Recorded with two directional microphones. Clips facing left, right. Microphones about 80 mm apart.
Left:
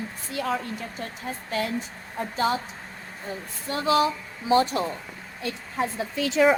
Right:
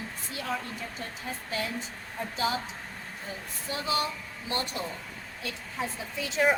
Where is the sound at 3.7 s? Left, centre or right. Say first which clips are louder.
Left 7 dB; left.